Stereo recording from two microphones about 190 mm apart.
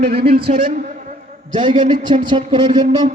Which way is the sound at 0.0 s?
55° right (ahead or behind).